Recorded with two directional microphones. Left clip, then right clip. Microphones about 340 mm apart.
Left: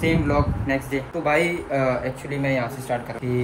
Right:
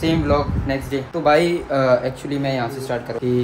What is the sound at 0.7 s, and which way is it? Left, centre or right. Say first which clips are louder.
Speech: right 1 dB; centre.